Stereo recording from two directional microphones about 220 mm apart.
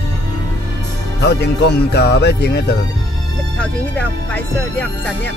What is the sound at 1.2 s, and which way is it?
Speech, 50° left (ahead or behind).